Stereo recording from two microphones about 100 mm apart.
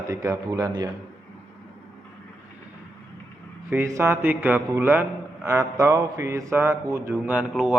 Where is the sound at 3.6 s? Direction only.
25° right (ahead or behind).